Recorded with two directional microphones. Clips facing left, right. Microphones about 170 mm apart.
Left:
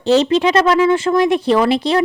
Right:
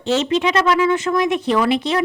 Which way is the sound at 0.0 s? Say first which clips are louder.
Left 5 dB; 35° left (ahead or behind).